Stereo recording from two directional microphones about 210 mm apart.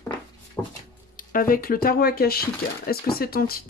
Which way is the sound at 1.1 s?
40° left (ahead or behind).